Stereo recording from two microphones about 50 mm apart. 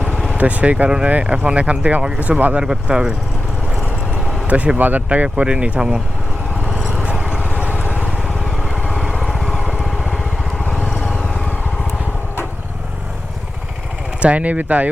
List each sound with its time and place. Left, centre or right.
0.1 s vehicle: centre
0.3 s speech: right
0.9 s speech: centre
4.4 s speech: right
6.7 s vehicle: centre
7.0 s vehicle: right
7.5 s vehicle: left
10.6 s vehicle: left
14.2 s speech: right